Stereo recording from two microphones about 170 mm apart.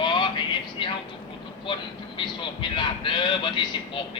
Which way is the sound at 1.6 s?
30° left (ahead or behind).